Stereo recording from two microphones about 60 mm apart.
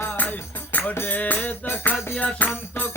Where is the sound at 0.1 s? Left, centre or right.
Left.